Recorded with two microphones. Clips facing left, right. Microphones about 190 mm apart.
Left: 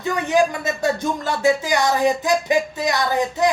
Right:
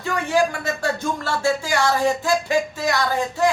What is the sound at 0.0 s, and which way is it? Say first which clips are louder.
Speech: left 2 dB; 20° left (ahead or behind).